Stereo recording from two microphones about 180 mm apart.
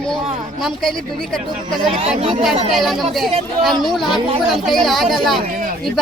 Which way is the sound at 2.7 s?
Centre (ahead or behind).